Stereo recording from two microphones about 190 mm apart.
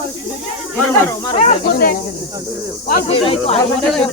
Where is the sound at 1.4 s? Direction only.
35° left (ahead or behind).